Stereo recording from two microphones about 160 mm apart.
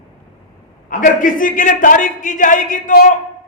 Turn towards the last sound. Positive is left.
turn(degrees=55)  # may be behind; listen again after turning